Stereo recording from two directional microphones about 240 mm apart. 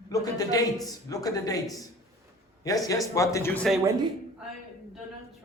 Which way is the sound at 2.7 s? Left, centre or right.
Centre.